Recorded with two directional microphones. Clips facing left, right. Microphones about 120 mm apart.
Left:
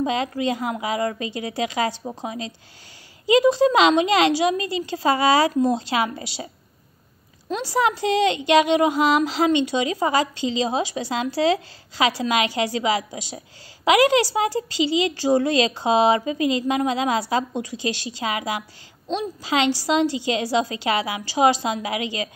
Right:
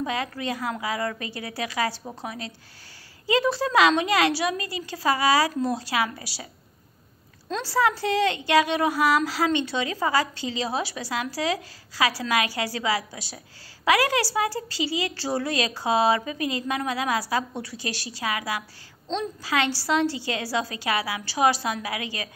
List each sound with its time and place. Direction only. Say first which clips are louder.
0.0 s a woman's voice: left 6 dB; 20° left (ahead or behind)